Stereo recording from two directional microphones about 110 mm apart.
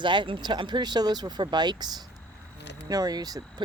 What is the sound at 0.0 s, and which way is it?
Speech, 45° right (ahead or behind).